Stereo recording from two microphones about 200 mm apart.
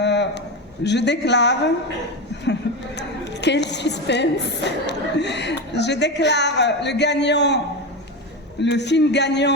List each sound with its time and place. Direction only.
0.0 s a sound: 60° left (ahead or behind)
0.9 s a woman's voice: 60° left (ahead or behind)
8.6 s a woman's voice: 60° left (ahead or behind)